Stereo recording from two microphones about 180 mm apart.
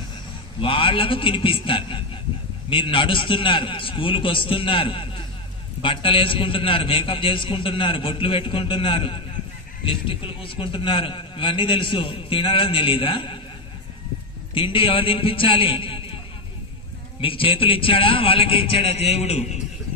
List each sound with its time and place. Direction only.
0.6 s a man's voice: 30° left (ahead or behind)
14.5 s a man's voice: 30° left (ahead or behind)
17.2 s a man's voice: 30° left (ahead or behind)